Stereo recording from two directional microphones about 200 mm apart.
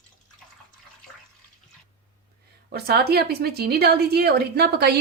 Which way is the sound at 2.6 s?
50° right (ahead or behind).